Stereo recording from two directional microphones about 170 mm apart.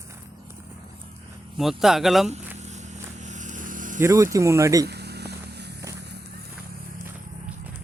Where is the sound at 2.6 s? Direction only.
40° right (ahead or behind).